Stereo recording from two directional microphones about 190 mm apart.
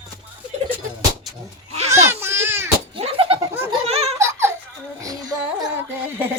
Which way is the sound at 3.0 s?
30° right (ahead or behind).